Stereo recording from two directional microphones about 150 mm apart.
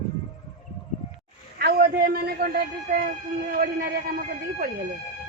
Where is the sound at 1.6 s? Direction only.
80° right.